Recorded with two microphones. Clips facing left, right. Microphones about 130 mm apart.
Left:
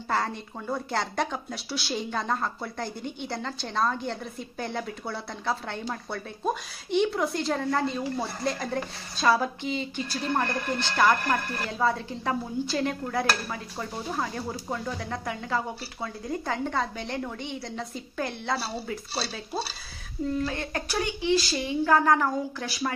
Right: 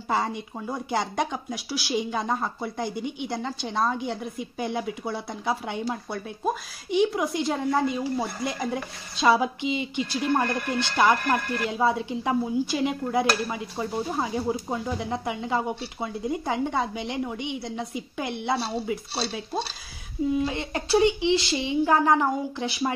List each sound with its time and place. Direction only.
0.1 s a woman's voice: 10° right (ahead or behind)
20.4 s speech: 20° right (ahead or behind)